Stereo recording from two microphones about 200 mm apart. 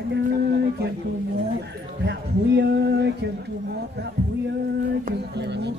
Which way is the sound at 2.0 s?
60° right (ahead or behind).